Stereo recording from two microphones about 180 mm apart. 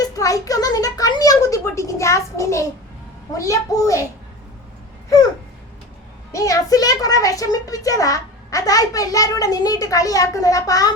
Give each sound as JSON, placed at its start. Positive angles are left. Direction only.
{"t": 0.0, "sound": "a sound", "side_deg": 20}
{"t": 3.3, "sound": "a child's voice", "side_deg": 15}
{"t": 6.3, "sound": "a child's voice", "side_deg": 20}